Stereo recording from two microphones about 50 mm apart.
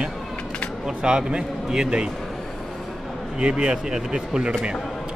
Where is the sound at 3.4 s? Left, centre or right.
Centre.